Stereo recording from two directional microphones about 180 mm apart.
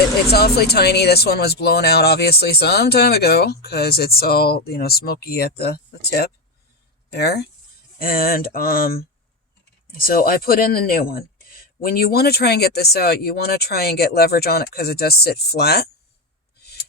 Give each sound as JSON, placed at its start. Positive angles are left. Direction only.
{"t": 0.3, "sound": "speech", "side_deg": 60}
{"t": 7.9, "sound": "speech", "side_deg": 55}
{"t": 10.0, "sound": "speech", "side_deg": 50}